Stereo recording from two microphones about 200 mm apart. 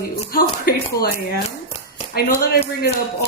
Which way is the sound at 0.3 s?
50° left (ahead or behind).